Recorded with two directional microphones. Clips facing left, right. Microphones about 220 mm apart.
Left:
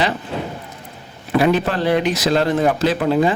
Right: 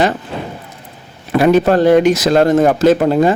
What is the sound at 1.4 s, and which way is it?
Speech, 45° right (ahead or behind).